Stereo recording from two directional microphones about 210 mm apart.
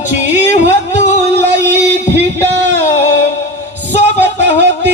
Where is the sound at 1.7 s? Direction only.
55° right (ahead or behind).